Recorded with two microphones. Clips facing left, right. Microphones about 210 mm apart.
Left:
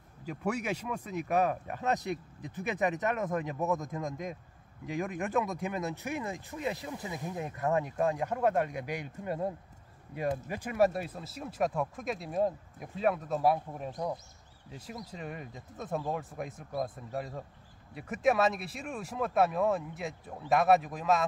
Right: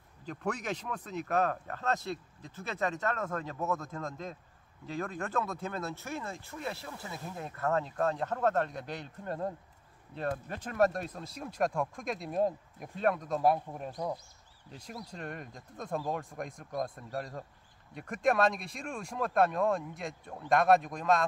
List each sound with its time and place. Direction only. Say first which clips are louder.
0.2 s speech: left 2 dB; 10° left (ahead or behind)